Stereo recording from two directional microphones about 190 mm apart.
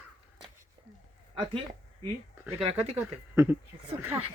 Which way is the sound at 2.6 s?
35° right (ahead or behind).